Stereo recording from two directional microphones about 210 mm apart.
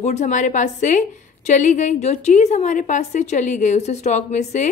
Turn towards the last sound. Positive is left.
turn(degrees=35)  # may be behind; listen again after turning